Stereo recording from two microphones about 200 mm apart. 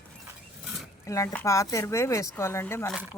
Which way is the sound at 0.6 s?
Centre (ahead or behind).